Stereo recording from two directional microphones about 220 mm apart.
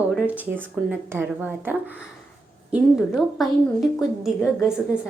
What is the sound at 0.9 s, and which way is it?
Speech, 10° right (ahead or behind).